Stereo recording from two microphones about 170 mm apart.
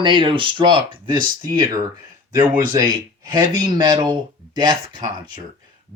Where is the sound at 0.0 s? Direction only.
30° right (ahead or behind).